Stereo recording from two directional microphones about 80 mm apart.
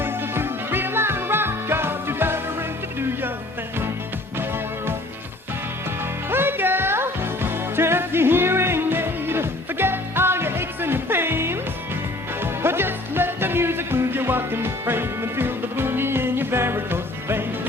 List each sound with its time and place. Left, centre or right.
0.0 s music: right
4.4 s music: right
6.3 s music: right